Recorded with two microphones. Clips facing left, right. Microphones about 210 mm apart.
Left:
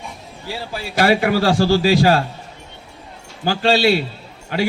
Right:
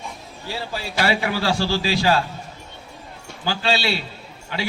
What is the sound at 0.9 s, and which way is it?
A man's voice, 50° left (ahead or behind).